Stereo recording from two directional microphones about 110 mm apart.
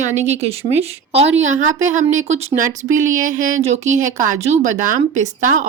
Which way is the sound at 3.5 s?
80° right.